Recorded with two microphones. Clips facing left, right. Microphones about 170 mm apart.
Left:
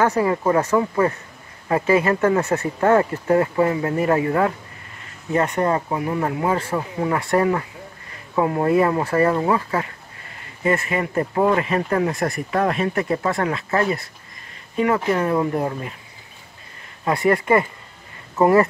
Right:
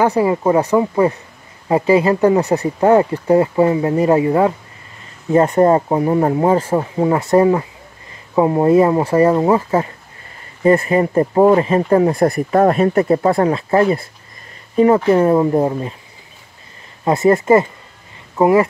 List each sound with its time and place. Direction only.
0.1 s speech: 25° right (ahead or behind)
5.3 s speech: 30° right (ahead or behind)
17.0 s speech: 25° right (ahead or behind)
18.3 s speech: 15° right (ahead or behind)